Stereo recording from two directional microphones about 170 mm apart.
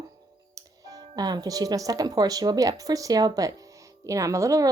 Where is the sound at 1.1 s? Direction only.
25° right (ahead or behind).